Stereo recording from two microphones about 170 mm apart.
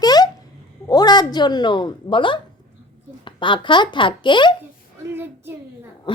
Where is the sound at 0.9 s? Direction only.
25° left (ahead or behind).